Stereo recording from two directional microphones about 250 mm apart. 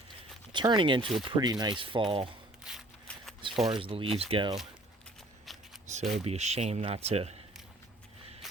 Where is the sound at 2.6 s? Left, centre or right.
Centre.